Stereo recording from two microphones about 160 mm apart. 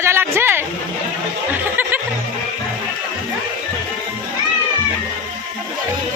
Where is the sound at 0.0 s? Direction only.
15° right (ahead or behind).